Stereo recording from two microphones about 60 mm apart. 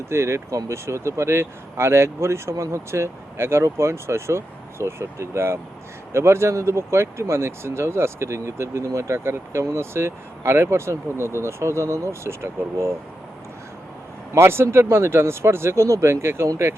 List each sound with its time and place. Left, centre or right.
0.1 s speech: right
14.3 s speech: right